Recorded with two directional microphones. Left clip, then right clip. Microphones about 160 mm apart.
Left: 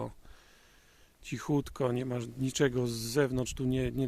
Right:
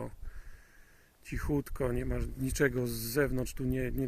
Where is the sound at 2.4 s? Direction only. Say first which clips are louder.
Left 1 dB; 15° left (ahead or behind).